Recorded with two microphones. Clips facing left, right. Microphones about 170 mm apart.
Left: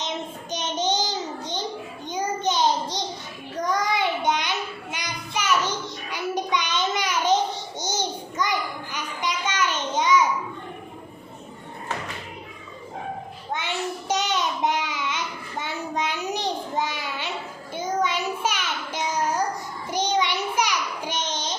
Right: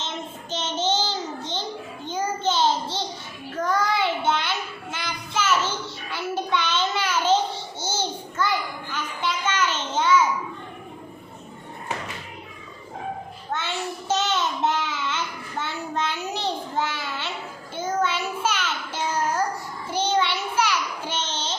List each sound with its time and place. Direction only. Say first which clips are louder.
0.5 s child singing: even; 15° left (ahead or behind)
13.5 s child singing: left 1 dB; 15° left (ahead or behind)
19.9 s a sound: right 1 dB; 15° left (ahead or behind)